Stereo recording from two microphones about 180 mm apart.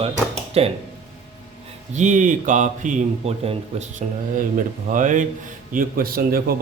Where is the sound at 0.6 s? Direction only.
35° right (ahead or behind).